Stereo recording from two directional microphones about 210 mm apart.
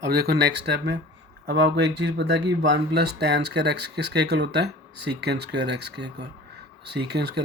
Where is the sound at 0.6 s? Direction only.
55° right (ahead or behind).